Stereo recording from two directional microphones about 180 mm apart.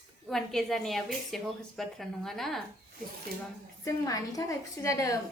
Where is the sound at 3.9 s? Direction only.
20° left (ahead or behind).